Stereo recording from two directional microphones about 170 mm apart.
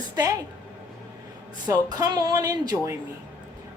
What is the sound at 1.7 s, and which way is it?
Speech, 20° right (ahead or behind).